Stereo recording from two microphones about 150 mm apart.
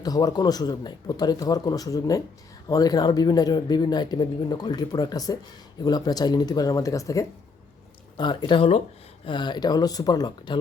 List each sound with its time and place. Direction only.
0.0 s speech: 25° left (ahead or behind)